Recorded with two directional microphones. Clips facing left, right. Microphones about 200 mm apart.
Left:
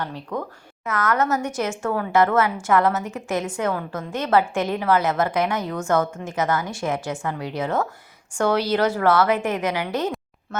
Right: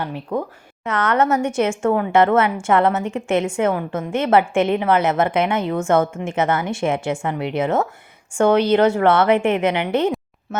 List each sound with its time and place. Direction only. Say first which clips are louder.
0.0 s a woman's voice: right 4 dB; 20° right (ahead or behind)